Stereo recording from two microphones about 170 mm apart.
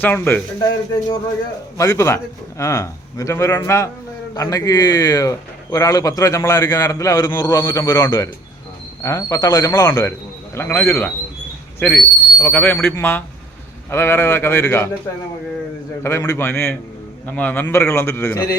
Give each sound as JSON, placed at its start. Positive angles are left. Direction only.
{"t": 0.0, "sound": "a man's voice", "side_deg": 10}
{"t": 1.8, "sound": "a man's voice", "side_deg": 15}
{"t": 16.0, "sound": "a man's voice", "side_deg": 15}